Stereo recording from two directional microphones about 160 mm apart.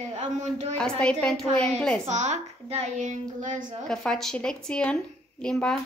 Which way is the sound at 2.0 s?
45° right (ahead or behind).